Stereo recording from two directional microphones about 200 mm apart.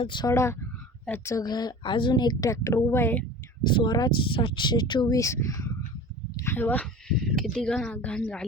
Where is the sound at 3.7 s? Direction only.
25° left (ahead or behind).